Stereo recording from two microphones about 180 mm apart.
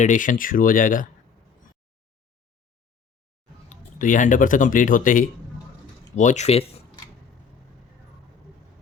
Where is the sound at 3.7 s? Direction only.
45° left (ahead or behind).